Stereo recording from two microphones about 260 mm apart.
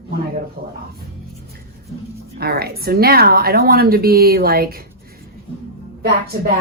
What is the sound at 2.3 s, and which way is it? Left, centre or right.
A woman's voice, right.